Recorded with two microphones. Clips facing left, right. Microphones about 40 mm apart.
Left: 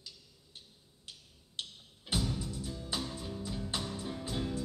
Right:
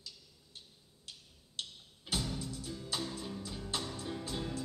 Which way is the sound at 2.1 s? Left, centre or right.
Centre.